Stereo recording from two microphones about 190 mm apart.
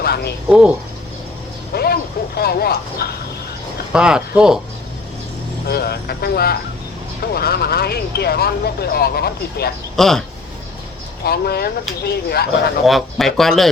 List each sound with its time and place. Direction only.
0.0 s a sound: 55° left (ahead or behind)
1.7 s a sound: 55° left (ahead or behind)
3.9 s speech: 5° right (ahead or behind)
5.6 s speech: 55° left (ahead or behind)
9.9 s speech: centre (ahead or behind)
11.2 s speech: 55° left (ahead or behind)
12.8 s speech: centre (ahead or behind)